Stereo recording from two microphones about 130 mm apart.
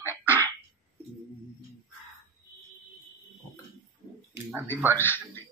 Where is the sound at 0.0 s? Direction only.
20° left (ahead or behind).